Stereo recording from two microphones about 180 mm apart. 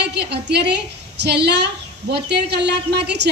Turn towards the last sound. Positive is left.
turn(degrees=-70)  # may be behind; listen again after turning